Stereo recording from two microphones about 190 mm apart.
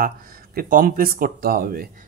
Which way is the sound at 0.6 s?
45° right (ahead or behind).